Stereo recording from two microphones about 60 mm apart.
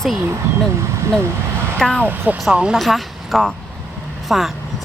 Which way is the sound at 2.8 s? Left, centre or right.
Centre.